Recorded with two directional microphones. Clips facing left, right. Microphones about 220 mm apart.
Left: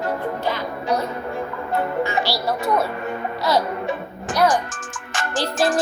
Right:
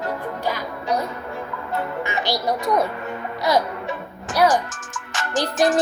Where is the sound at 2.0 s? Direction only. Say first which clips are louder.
Left 2 dB; 20° right (ahead or behind).